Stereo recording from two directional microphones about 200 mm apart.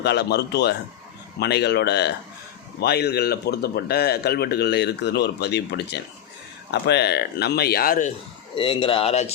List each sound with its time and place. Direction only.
0.0 s speech: 55° left (ahead or behind)
8.5 s speech: 25° left (ahead or behind)